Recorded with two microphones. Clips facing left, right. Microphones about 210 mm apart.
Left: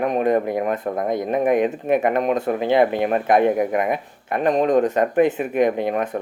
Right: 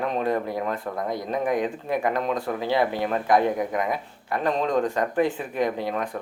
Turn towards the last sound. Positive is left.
turn(degrees=35)  # may be behind; listen again after turning